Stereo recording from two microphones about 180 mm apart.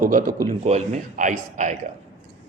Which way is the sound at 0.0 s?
50° right (ahead or behind).